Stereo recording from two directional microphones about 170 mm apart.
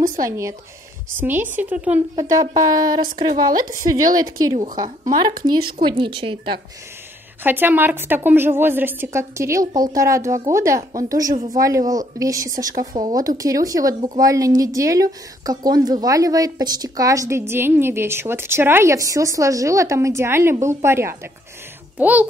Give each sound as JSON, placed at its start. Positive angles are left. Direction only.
{"t": 0.2, "sound": "a woman's voice", "side_deg": -20}
{"t": 2.1, "sound": "speech", "side_deg": -20}
{"t": 7.4, "sound": "a woman's voice", "side_deg": -10}
{"t": 10.8, "sound": "a woman's voice", "side_deg": -45}
{"t": 11.1, "sound": "a woman's voice", "side_deg": -20}